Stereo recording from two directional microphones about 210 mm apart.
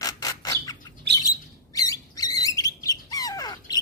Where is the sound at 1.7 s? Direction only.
15° left (ahead or behind).